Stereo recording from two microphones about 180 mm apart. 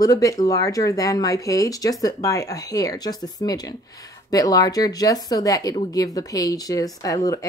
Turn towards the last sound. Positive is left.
turn(degrees=20)  # may be behind; listen again after turning